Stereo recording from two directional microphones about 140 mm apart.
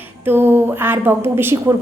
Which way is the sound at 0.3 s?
15° right (ahead or behind).